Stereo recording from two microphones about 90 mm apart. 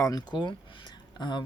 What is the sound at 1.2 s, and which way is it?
Speech, 55° left (ahead or behind).